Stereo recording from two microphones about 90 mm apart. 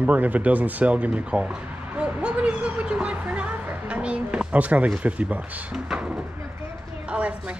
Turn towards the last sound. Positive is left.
turn(degrees=-15)  # may be behind; listen again after turning